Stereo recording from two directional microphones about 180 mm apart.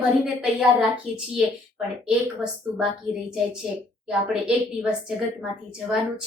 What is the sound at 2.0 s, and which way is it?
Speech, 5° right (ahead or behind).